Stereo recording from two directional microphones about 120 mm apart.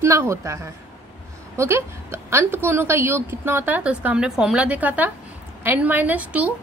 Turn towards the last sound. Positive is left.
turn(degrees=-15)  # may be behind; listen again after turning